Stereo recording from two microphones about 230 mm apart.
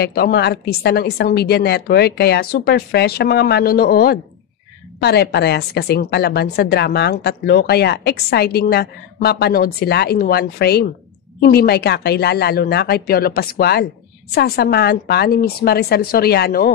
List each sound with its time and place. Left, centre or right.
0.0 s a woman's voice: left